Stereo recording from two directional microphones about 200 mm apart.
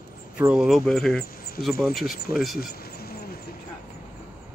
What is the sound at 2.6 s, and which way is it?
Insect, 50° left (ahead or behind).